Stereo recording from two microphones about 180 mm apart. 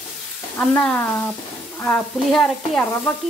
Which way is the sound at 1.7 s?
10° left (ahead or behind).